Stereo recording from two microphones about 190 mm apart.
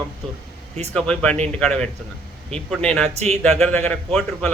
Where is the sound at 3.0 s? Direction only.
35° right (ahead or behind).